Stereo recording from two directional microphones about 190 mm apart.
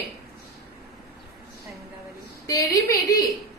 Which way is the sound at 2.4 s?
15° left (ahead or behind).